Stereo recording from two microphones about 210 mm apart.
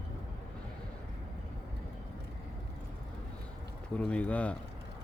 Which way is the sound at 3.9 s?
5° left (ahead or behind).